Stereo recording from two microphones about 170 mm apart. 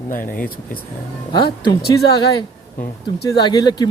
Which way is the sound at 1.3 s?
25° left (ahead or behind).